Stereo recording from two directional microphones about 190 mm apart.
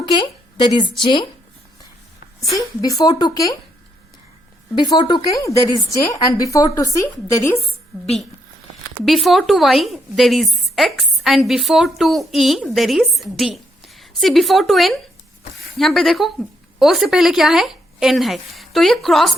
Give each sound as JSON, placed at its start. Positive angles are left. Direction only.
{"t": 0.0, "sound": "speech", "side_deg": 25}
{"t": 2.5, "sound": "speech", "side_deg": 20}
{"t": 4.8, "sound": "a woman's voice", "side_deg": 20}
{"t": 9.0, "sound": "a woman's voice", "side_deg": 0}